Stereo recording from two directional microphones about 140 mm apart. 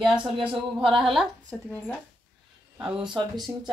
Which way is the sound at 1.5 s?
10° left (ahead or behind).